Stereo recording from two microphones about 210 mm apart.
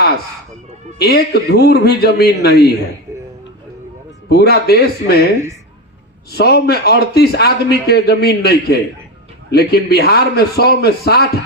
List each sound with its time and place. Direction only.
0.9 s a man's voice: 50° left (ahead or behind)
4.3 s a man's voice: 50° left (ahead or behind)
6.3 s a man's voice: 50° left (ahead or behind)